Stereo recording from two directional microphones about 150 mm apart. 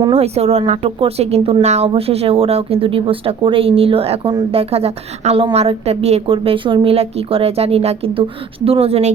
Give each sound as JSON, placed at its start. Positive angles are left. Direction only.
{"t": 0.1, "sound": "a woman's voice", "side_deg": -45}